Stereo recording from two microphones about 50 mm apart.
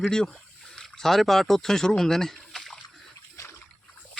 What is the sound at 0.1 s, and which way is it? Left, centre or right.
Speech, centre.